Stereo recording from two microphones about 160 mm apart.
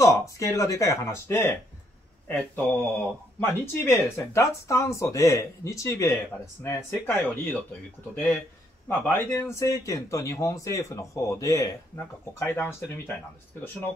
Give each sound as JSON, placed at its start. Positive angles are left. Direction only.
{"t": 0.0, "sound": "speech", "side_deg": 20}